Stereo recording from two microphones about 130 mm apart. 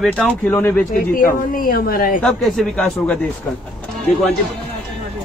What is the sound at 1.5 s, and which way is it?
Speech, 90° left.